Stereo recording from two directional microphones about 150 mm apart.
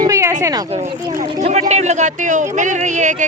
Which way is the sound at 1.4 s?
50° right (ahead or behind).